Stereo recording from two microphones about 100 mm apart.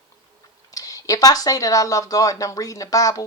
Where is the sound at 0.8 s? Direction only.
35° left (ahead or behind).